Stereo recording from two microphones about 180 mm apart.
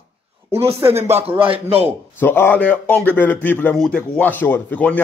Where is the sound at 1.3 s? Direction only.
30° right (ahead or behind).